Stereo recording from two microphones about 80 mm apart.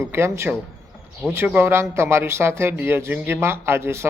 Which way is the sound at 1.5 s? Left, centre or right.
Right.